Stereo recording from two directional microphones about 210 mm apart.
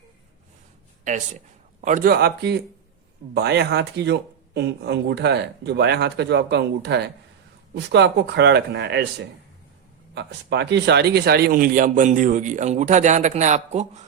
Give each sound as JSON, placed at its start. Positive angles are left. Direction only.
{"t": 1.0, "sound": "speech", "side_deg": -35}
{"t": 10.2, "sound": "speech", "side_deg": -55}